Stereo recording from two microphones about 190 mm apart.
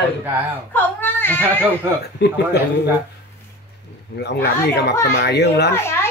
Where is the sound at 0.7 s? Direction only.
10° left (ahead or behind).